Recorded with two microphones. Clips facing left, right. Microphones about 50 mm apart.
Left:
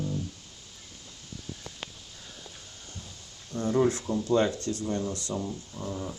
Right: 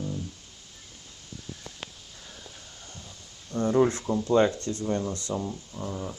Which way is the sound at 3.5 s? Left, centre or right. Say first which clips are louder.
Right 2 dB; right.